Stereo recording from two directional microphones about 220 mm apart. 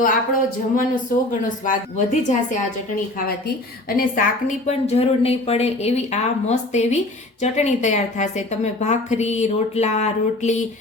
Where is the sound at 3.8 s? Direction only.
40° left (ahead or behind).